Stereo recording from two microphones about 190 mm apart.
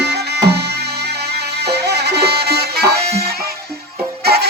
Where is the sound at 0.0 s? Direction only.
60° right (ahead or behind).